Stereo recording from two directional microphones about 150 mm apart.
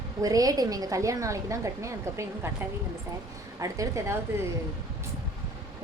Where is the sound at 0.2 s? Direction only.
25° right (ahead or behind).